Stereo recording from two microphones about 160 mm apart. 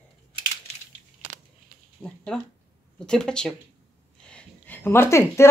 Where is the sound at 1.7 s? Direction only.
60° right (ahead or behind).